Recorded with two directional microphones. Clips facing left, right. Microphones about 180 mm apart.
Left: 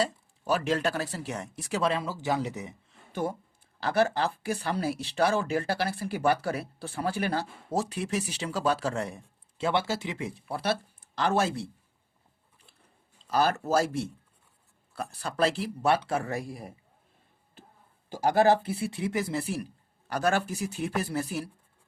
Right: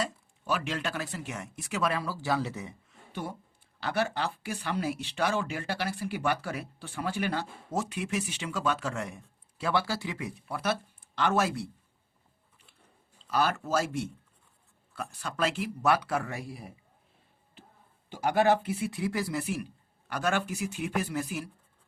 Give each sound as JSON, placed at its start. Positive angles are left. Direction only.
{"t": 0.0, "sound": "speech", "side_deg": 40}
{"t": 3.1, "sound": "speech", "side_deg": 45}
{"t": 9.6, "sound": "speech", "side_deg": 25}
{"t": 13.2, "sound": "speech", "side_deg": 40}
{"t": 16.3, "sound": "speech", "side_deg": 45}
{"t": 18.1, "sound": "a man's voice", "side_deg": 40}